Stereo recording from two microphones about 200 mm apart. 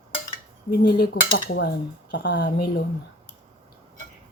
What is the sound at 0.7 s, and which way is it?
Cutlery, 50° left (ahead or behind).